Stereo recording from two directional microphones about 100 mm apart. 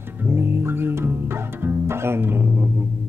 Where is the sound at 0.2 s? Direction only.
20° right (ahead or behind).